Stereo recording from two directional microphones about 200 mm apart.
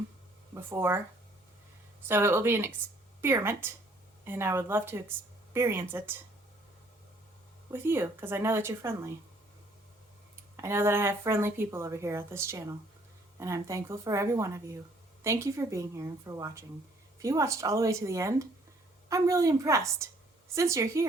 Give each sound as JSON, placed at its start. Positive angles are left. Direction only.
{"t": 0.5, "sound": "speech", "side_deg": -10}
{"t": 2.0, "sound": "speech", "side_deg": -10}
{"t": 7.7, "sound": "speech", "side_deg": -10}
{"t": 10.6, "sound": "speech", "side_deg": -10}